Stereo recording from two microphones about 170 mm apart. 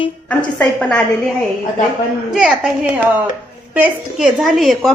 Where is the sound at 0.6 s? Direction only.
5° left (ahead or behind).